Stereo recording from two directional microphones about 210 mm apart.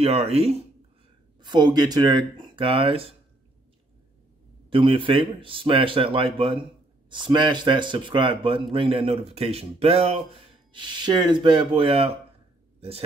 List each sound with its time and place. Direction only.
0.0 s speech: 30° right (ahead or behind)
4.6 s speech: 25° right (ahead or behind)